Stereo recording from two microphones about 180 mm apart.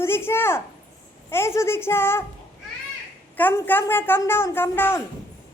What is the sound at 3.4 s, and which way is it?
A woman's voice, 10° left (ahead or behind).